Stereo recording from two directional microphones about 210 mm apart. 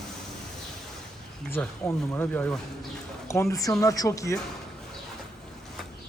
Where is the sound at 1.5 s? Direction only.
10° left (ahead or behind).